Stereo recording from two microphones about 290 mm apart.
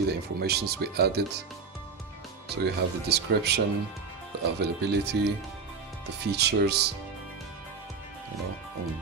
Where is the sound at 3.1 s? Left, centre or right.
Right.